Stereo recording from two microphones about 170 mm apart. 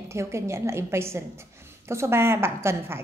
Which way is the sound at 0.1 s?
15° right (ahead or behind).